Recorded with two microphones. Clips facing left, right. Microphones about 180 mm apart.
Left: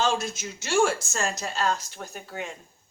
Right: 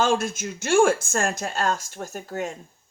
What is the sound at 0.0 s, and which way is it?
A woman's voice, 50° right (ahead or behind).